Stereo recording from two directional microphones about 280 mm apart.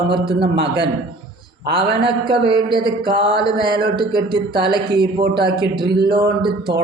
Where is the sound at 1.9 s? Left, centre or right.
Centre.